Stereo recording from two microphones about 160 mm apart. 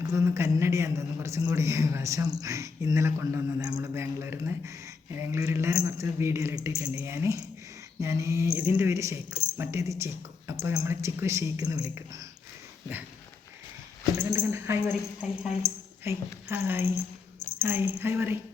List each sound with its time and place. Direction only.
0.0 s a man's voice: 20° right (ahead or behind)
14.2 s a woman's voice: 15° right (ahead or behind)